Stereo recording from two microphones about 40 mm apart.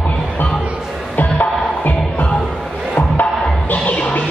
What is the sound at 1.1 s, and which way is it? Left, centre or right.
Music, left.